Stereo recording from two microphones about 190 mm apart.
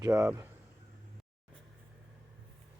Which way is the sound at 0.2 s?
15° right (ahead or behind).